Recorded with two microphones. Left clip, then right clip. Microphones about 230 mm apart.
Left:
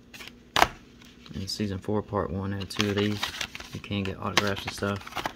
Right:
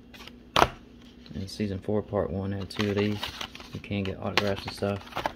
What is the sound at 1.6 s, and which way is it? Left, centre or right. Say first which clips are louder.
Speech: right 2 dB; centre.